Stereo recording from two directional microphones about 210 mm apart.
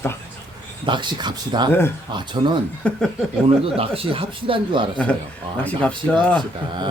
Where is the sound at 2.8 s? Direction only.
5° left (ahead or behind).